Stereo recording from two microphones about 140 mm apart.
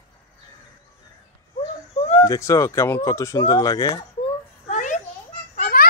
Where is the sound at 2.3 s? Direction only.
25° left (ahead or behind).